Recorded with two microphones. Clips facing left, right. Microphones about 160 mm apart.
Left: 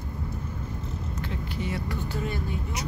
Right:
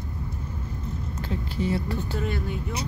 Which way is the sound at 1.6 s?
30° right (ahead or behind).